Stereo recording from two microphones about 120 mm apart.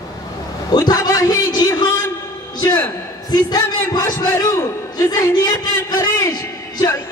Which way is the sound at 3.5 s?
30° left (ahead or behind).